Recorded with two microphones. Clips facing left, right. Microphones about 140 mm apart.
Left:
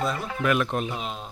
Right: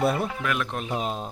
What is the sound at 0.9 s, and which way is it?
Speech, 40° right (ahead or behind).